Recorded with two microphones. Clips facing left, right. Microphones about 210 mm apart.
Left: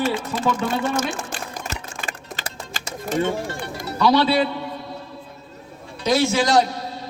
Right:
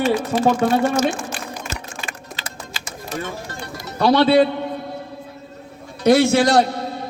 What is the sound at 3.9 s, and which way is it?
Speech, 55° right (ahead or behind).